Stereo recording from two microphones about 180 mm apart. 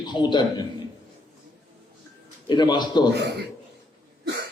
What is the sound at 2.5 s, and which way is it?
Speech, 25° left (ahead or behind).